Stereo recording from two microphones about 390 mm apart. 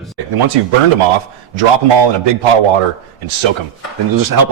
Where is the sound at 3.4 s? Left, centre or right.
Right.